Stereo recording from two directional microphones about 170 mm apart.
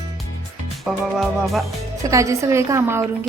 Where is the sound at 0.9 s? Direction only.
Centre (ahead or behind).